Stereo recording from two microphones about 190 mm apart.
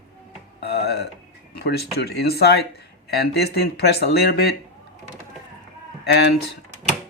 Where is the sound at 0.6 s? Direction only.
60° left (ahead or behind).